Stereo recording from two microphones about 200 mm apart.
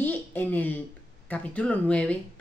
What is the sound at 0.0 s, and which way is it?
A woman's voice, 10° left (ahead or behind).